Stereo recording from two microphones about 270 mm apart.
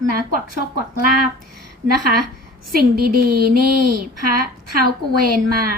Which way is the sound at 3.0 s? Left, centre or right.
Right.